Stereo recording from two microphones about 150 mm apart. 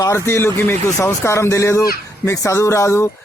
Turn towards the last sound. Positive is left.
turn(degrees=15)  # may be behind; listen again after turning